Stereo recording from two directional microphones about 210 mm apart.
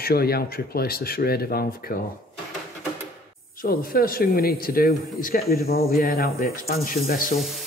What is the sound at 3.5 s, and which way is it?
Speech, 45° left (ahead or behind).